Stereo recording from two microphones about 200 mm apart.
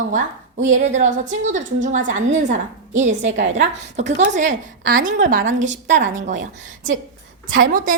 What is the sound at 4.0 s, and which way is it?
A woman's voice, 35° right (ahead or behind).